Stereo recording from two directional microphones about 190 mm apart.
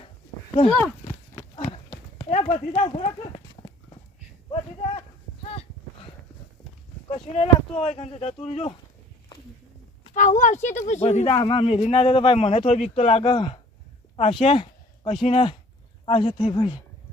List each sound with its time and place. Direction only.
1.5 s clip-clop: 30° left (ahead or behind)
7.1 s speech: 30° left (ahead or behind)
10.2 s speech: 40° left (ahead or behind)